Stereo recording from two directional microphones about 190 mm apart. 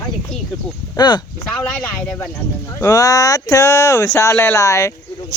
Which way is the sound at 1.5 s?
5° left (ahead or behind).